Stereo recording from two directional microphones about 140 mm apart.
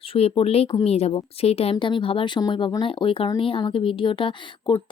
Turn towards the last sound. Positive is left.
turn(degrees=35)  # may be behind; listen again after turning